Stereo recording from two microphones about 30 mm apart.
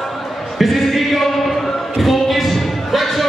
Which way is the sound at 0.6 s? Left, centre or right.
Centre.